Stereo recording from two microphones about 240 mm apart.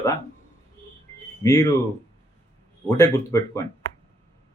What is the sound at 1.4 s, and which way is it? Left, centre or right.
Speech, centre.